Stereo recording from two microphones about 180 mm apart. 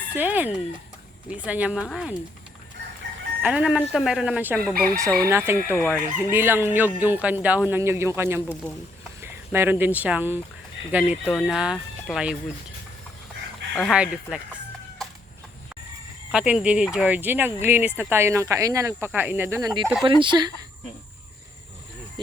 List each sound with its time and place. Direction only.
0.2 s speech: 10° right (ahead or behind)
3.4 s speech: 5° right (ahead or behind)
13.9 s speech: 5° right (ahead or behind)
16.3 s speech: 5° right (ahead or behind)
19.8 s speech: centre (ahead or behind)
20.1 s speech: 25° right (ahead or behind)